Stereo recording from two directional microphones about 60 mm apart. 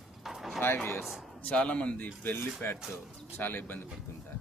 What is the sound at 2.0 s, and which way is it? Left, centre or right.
Speech, left.